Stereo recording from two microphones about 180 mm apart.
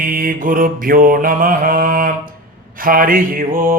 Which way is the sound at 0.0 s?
50° right (ahead or behind).